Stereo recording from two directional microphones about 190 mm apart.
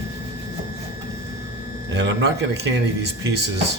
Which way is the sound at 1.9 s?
65° right (ahead or behind).